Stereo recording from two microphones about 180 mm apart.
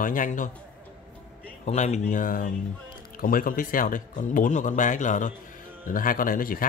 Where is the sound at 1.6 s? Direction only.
40° left (ahead or behind).